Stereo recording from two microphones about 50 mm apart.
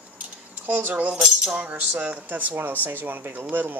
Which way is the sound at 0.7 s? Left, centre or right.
Right.